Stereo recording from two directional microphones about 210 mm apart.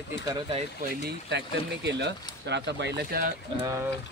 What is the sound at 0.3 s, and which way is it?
Speech, 25° right (ahead or behind).